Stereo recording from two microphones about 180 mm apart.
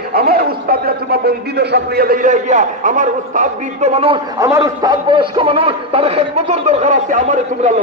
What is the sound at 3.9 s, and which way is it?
Speech, 30° right (ahead or behind).